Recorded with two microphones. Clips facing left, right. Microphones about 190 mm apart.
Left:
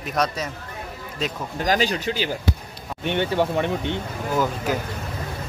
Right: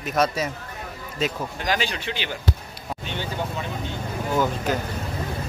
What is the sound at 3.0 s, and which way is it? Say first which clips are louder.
Speech: left 9 dB; 65° left (ahead or behind).